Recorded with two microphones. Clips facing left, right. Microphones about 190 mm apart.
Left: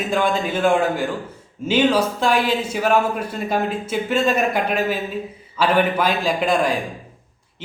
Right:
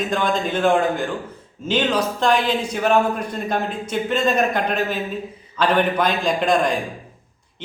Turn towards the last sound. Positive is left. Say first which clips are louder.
# even
turn(degrees=5)  # may be behind; listen again after turning